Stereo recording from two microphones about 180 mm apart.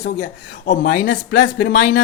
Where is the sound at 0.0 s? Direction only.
50° left (ahead or behind).